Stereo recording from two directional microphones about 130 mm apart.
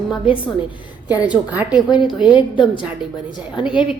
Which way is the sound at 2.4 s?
35° left (ahead or behind).